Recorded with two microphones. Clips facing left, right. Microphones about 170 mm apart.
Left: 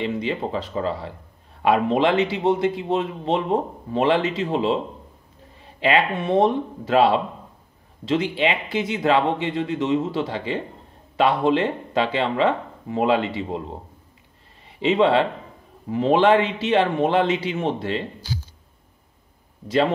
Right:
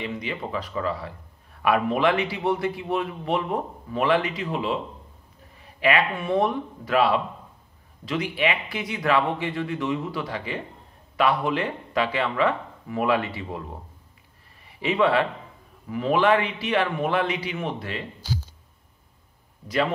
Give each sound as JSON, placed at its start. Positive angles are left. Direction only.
{"t": 0.0, "sound": "a man's voice", "side_deg": 30}
{"t": 5.8, "sound": "a man's voice", "side_deg": 25}